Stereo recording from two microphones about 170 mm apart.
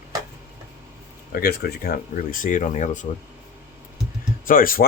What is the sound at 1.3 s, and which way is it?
Speech, 65° left (ahead or behind).